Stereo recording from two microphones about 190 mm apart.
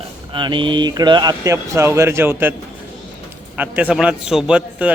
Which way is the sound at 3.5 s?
10° right (ahead or behind).